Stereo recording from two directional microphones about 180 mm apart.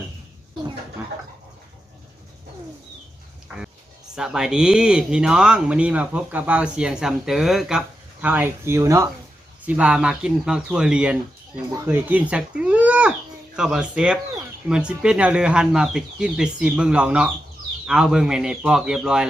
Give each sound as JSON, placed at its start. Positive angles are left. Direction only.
{"t": 3.5, "sound": "music", "side_deg": -10}
{"t": 4.1, "sound": "speech", "side_deg": -5}